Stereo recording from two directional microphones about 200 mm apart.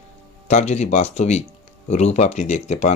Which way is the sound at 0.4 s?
35° left (ahead or behind).